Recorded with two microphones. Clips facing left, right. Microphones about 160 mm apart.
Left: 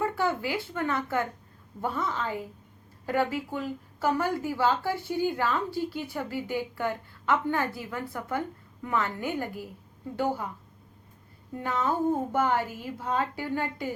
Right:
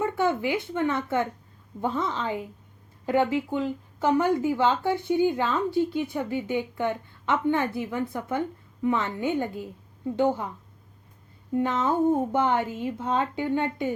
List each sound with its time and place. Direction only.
0.0 s speech: 20° right (ahead or behind)
11.5 s speech: 20° right (ahead or behind)